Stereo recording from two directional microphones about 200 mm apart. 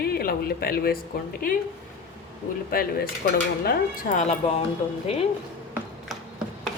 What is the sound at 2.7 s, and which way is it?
Speech, 50° left (ahead or behind).